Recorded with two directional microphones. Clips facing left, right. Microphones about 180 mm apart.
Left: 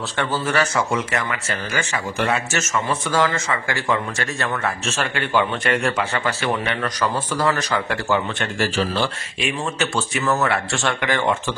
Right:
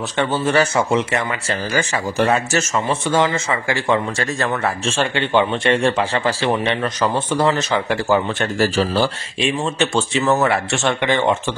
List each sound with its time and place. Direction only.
0.2 s speech: 25° right (ahead or behind)
8.4 s speech: 40° right (ahead or behind); by 11.5 s 20° right (ahead or behind)